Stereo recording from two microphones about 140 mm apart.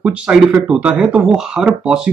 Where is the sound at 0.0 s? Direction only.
5° right (ahead or behind).